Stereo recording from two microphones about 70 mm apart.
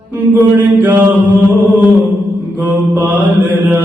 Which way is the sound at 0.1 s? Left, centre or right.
Right.